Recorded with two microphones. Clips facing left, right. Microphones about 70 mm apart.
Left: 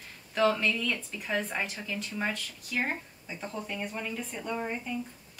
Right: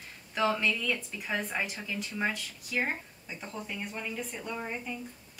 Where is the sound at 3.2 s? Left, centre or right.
Centre.